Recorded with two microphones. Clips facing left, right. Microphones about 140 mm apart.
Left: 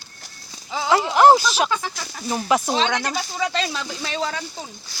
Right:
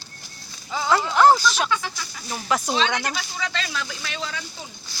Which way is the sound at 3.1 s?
40° left (ahead or behind).